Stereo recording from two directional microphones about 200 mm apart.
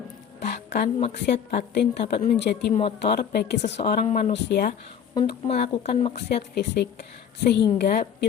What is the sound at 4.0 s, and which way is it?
Speech, 35° left (ahead or behind).